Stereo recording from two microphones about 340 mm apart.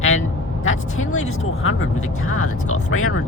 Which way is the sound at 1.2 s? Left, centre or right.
Left.